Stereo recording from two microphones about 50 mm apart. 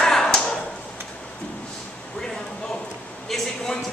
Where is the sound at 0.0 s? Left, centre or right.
Centre.